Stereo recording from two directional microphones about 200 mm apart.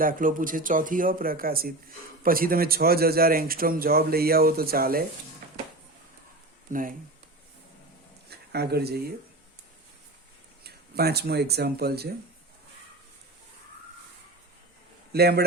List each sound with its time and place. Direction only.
0.0 s a man's voice: 45° right (ahead or behind)
6.7 s speech: 40° right (ahead or behind)
8.3 s speech: 55° right (ahead or behind)
10.6 s speech: 50° right (ahead or behind)
15.1 s a man's voice: 50° right (ahead or behind)